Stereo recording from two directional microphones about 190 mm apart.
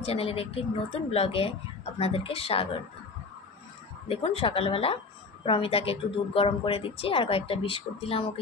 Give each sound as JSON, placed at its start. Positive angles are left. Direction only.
{"t": 0.0, "sound": "a woman's voice", "side_deg": 30}
{"t": 4.1, "sound": "a woman's voice", "side_deg": 30}